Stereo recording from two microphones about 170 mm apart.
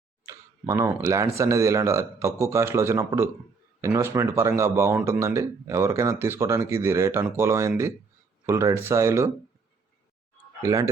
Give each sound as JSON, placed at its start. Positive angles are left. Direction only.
{"t": 0.3, "sound": "speech", "side_deg": -20}
{"t": 10.6, "sound": "speech", "side_deg": -20}